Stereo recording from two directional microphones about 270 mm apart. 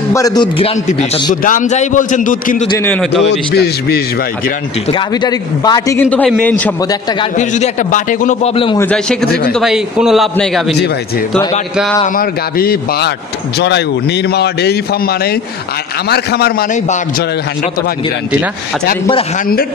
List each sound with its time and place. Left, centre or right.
0.1 s a man's voice: centre; by 2.7 s left
2.7 s a man's voice: centre
3.3 s a man's voice: left
4.9 s a man's voice: centre
7.2 s a man's voice: left
8.8 s a man's voice: centre
12.2 s a man's voice: left